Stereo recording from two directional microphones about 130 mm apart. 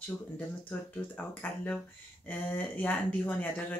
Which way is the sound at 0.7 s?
15° left (ahead or behind).